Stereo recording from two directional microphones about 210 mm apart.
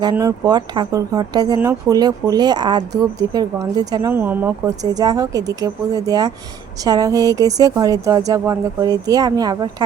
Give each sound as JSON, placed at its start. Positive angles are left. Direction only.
{"t": 0.0, "sound": "speech", "side_deg": -15}